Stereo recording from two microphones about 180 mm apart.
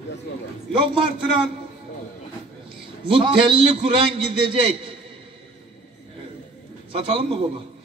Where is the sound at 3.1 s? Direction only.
30° right (ahead or behind).